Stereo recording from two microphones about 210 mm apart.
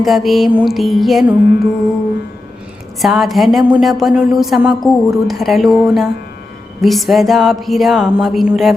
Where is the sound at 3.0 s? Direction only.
Centre (ahead or behind).